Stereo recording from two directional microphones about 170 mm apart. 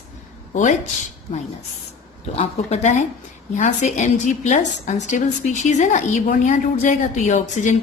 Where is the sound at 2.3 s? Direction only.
40° left (ahead or behind).